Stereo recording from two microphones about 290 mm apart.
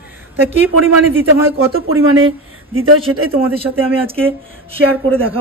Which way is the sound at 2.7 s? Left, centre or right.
Right.